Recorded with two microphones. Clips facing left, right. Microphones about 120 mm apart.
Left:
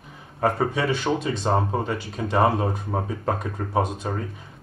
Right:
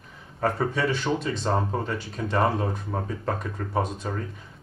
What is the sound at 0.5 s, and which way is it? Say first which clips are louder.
Speech: left 2 dB; 5° left (ahead or behind).